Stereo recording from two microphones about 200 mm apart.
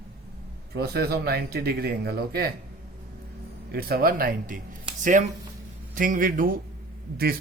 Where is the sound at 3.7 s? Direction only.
50° right (ahead or behind).